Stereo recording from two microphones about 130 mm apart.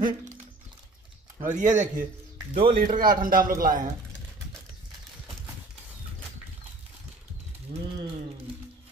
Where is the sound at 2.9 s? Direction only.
90° right.